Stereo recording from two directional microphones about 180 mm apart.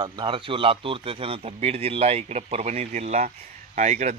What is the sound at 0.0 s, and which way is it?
A man's voice, 30° right (ahead or behind).